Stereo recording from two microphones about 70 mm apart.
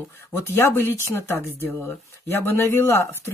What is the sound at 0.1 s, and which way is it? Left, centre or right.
Speech, left.